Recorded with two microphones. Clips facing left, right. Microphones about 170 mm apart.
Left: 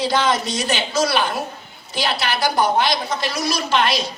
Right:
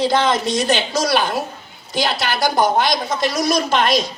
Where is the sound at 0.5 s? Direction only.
40° right (ahead or behind).